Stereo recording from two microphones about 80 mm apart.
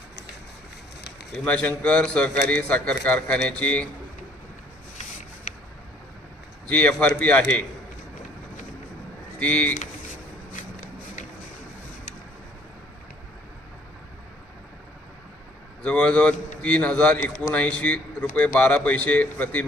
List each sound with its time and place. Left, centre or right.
1.5 s a man's voice: centre
6.7 s a man's voice: centre
9.4 s a man's voice: centre
15.8 s a man's voice: centre